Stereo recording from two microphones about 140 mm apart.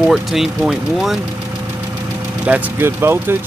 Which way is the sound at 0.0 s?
Centre (ahead or behind).